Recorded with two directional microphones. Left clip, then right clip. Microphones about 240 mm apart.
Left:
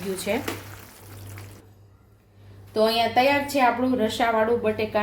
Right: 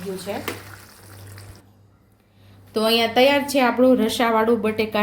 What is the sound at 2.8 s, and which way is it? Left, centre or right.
A woman's voice, right.